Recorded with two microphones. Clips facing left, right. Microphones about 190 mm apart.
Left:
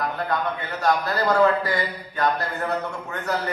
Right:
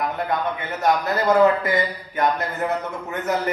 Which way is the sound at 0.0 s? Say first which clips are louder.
Right 2 dB; 20° right (ahead or behind).